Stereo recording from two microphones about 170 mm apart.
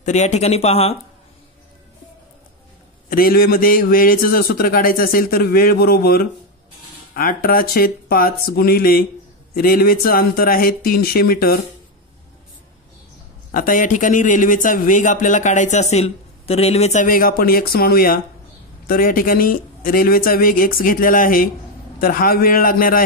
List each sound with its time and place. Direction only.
0.0 s speech: 40° left (ahead or behind)
3.1 s a man's voice: 60° left (ahead or behind)
13.5 s a man's voice: 55° left (ahead or behind)